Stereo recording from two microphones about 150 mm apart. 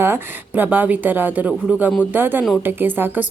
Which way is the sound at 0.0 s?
15° right (ahead or behind).